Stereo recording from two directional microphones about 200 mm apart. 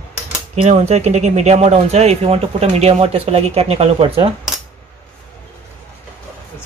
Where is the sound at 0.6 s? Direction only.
35° right (ahead or behind).